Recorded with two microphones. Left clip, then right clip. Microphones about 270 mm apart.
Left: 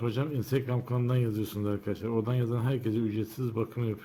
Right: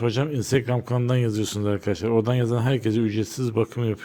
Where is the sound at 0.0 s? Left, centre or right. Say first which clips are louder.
Right 8 dB; right.